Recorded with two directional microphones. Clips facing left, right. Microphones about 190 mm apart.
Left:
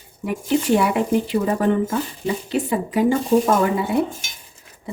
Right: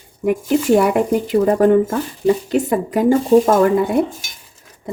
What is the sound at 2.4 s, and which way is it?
Speech, 45° right (ahead or behind).